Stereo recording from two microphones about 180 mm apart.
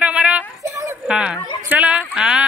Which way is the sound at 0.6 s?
15° right (ahead or behind).